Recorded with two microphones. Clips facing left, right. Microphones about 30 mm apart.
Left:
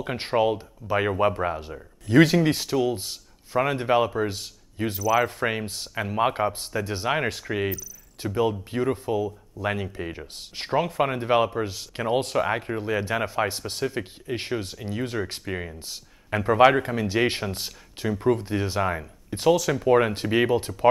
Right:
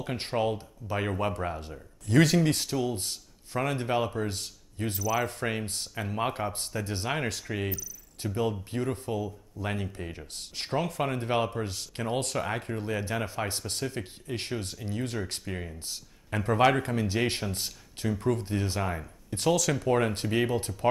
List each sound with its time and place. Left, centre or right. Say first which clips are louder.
0.0 s speech: left 6 dB; left
10.7 s speech: left 6 dB; left
11.2 s speech: left 6 dB; centre